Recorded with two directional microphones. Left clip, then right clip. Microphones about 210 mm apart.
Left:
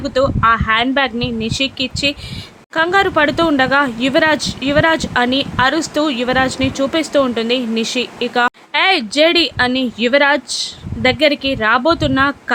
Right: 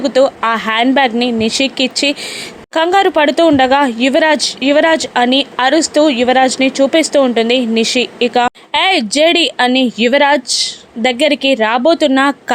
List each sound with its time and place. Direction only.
0.0 s speech: 15° right (ahead or behind)